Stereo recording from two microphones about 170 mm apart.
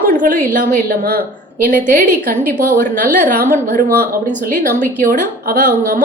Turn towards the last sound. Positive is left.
turn(degrees=-55)  # may be behind; listen again after turning